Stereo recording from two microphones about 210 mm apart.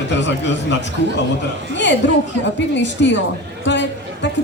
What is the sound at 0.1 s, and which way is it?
A woman's voice, 60° left (ahead or behind).